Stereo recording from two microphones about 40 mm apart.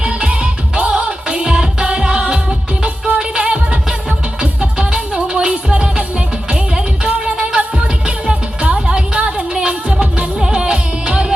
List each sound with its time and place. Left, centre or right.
0.0 s music: right